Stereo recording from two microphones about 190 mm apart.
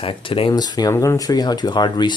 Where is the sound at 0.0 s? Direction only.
30° left (ahead or behind).